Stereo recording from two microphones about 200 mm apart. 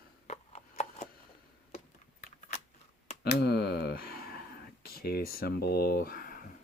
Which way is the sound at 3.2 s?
55° left (ahead or behind).